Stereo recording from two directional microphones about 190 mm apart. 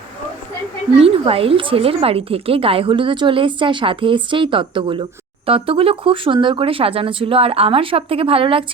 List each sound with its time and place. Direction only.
0.9 s a woman's voice: 30° right (ahead or behind)